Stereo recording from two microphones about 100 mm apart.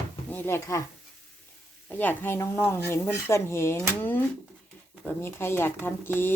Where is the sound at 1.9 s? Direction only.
20° left (ahead or behind).